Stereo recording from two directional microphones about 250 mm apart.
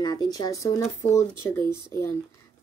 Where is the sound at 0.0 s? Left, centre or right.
Centre.